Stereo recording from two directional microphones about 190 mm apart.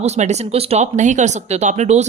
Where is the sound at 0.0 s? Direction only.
35° right (ahead or behind).